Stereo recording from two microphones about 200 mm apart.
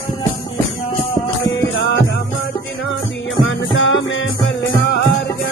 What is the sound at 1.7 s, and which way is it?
Music, 60° left (ahead or behind).